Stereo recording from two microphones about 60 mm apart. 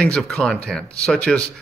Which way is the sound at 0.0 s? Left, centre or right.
Centre.